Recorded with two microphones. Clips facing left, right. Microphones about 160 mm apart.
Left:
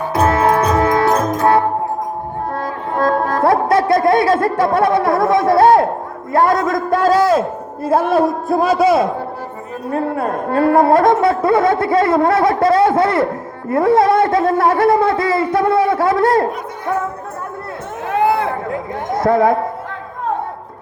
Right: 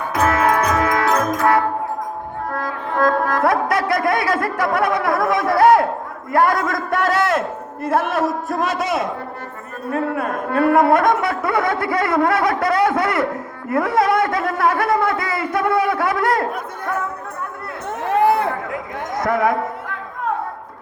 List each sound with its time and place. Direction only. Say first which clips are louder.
0.1 s music: left 3 dB; 25° left (ahead or behind)
6.3 s a man's voice: left 3 dB; 25° left (ahead or behind)
18.7 s a sound: left 5 dB; 25° left (ahead or behind)